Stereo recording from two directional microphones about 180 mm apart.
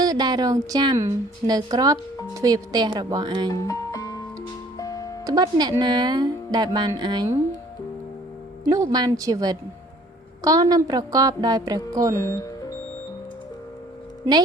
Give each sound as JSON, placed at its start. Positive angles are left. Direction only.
{"t": 0.0, "sound": "speech", "side_deg": -20}
{"t": 3.5, "sound": "music", "side_deg": 20}
{"t": 5.2, "sound": "speech", "side_deg": -20}
{"t": 8.6, "sound": "speech", "side_deg": -15}
{"t": 12.1, "sound": "speech", "side_deg": 15}